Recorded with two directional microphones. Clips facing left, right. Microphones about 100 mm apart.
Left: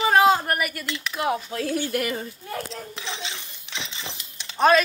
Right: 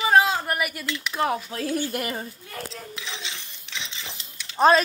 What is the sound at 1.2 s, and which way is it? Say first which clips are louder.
Speech: even; 30° right (ahead or behind).